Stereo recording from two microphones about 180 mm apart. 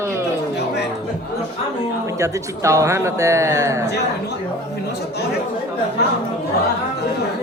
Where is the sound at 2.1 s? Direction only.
15° right (ahead or behind).